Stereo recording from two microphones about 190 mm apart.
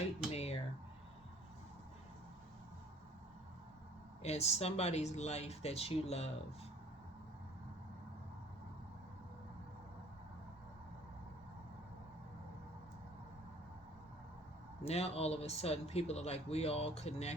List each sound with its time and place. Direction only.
0.3 s a sound: 35° left (ahead or behind)
4.2 s speech: 35° left (ahead or behind)
14.8 s speech: 30° left (ahead or behind)